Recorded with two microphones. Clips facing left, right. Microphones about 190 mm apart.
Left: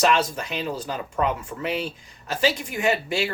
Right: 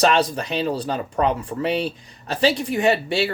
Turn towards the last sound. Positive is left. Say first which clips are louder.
# right 4 dB
turn(degrees=-30)  # may be behind; listen again after turning